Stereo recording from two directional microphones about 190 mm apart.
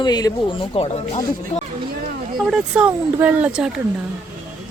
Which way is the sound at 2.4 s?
5° right (ahead or behind).